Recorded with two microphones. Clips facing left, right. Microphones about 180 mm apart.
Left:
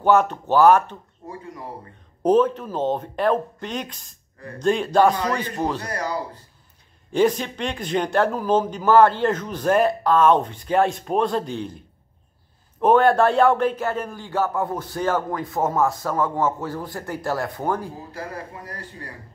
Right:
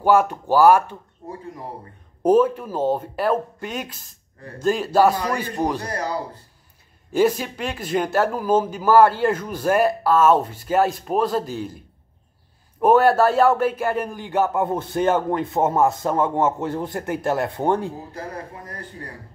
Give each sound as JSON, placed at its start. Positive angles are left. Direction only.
{"t": 0.0, "sound": "speech", "side_deg": -10}
{"t": 2.2, "sound": "speech", "side_deg": -10}
{"t": 7.1, "sound": "speech", "side_deg": -5}
{"t": 12.8, "sound": "speech", "side_deg": -5}